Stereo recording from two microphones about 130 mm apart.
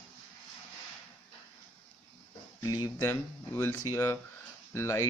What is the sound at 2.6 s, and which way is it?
Speech, 25° left (ahead or behind).